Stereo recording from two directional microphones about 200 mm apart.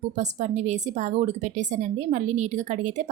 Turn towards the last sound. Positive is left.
turn(degrees=-35)  # may be behind; listen again after turning